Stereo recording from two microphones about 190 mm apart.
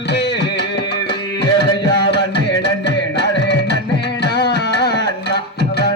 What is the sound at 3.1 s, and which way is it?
Music, 65° left (ahead or behind).